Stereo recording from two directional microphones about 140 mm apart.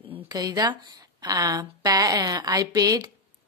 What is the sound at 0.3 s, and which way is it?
A woman's voice, 25° right (ahead or behind).